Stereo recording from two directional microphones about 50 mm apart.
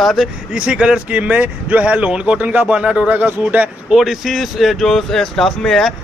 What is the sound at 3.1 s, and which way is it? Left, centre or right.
Speech, right.